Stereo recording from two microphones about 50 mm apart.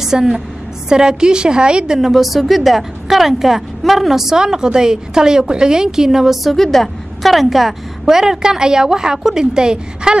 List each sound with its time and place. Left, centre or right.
0.0 s a woman's voice: centre
2.0 s a woman's voice: centre
6.5 s a woman's voice: centre